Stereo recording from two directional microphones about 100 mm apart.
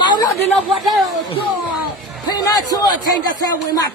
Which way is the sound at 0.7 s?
Centre (ahead or behind).